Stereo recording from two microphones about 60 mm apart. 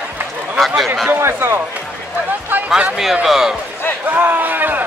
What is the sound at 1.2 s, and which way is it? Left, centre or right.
Speech, right.